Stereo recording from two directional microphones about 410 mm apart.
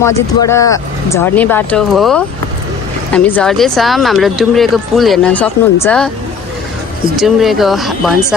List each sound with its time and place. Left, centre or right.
0.0 s speech: centre
7.2 s speech: centre